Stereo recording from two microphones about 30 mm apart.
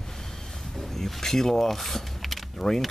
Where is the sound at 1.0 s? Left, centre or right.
Centre.